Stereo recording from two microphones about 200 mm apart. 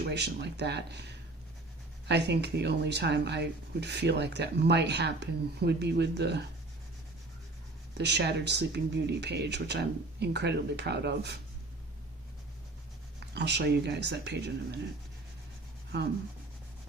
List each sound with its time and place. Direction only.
0.0 s speech: 55° right (ahead or behind)
7.9 s speech: 60° right (ahead or behind)
13.1 s speech: 55° right (ahead or behind)